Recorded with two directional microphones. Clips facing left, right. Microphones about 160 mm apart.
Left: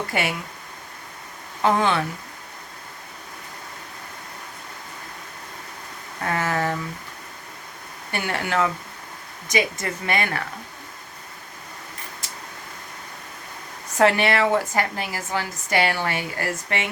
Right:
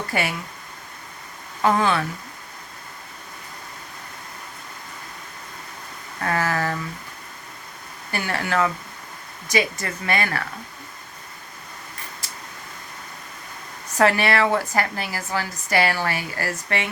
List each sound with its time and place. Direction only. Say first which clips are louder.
0.1 s a woman's voice: right 2 dB; 20° left (ahead or behind)
1.6 s a woman's voice: even; 20° left (ahead or behind)
6.2 s a woman's voice: even; 20° left (ahead or behind)
8.1 s a woman's voice: even; 20° left (ahead or behind)
14.0 s a woman's voice: even; 20° left (ahead or behind)